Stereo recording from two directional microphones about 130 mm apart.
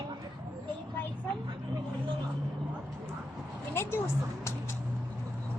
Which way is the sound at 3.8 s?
15° left (ahead or behind).